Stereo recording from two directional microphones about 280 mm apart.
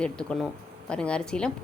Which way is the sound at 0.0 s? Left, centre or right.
Centre.